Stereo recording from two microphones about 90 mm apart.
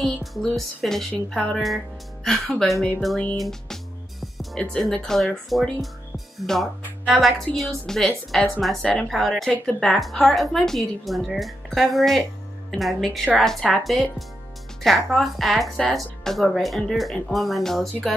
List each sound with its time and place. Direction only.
0.0 s speech: centre (ahead or behind)
3.3 s music: 5° left (ahead or behind)
4.8 s speech: 5° left (ahead or behind)
9.5 s speech: 15° left (ahead or behind)
9.8 s speech: centre (ahead or behind)